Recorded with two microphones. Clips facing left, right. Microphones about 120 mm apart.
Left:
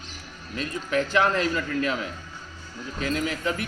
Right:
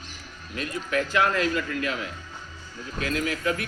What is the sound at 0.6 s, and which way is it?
Speech, 30° left (ahead or behind).